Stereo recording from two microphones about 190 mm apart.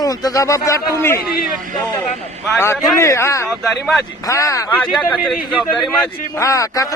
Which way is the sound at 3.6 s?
Centre (ahead or behind).